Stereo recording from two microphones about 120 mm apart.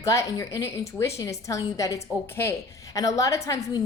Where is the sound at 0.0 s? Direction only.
25° left (ahead or behind).